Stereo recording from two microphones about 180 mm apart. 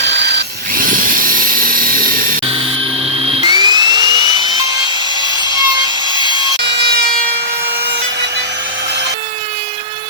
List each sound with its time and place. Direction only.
0.3 s tools: 50° right (ahead or behind)
3.4 s dental drill: 25° right (ahead or behind)
5.2 s wood: 25° left (ahead or behind)
5.5 s wood: 20° right (ahead or behind)
6.1 s sawing: 25° left (ahead or behind)
6.7 s emergency vehicle: 65° right (ahead or behind)